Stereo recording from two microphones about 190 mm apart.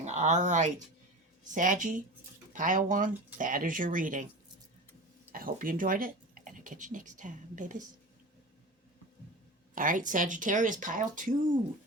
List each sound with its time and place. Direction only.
0.0 s speech: 35° right (ahead or behind)
5.3 s speech: 50° right (ahead or behind)
9.7 s speech: 45° right (ahead or behind)